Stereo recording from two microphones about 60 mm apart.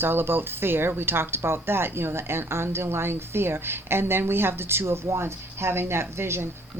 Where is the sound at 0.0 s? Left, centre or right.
Right.